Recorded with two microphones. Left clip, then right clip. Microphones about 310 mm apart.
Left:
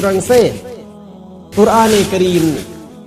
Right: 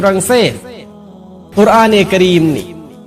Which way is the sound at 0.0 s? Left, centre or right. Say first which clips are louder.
Right 1 dB; right.